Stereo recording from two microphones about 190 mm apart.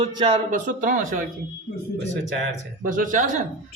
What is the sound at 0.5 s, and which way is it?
Speech, 45° right (ahead or behind).